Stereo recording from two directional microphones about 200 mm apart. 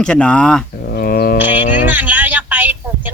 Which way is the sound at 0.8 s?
50° left (ahead or behind).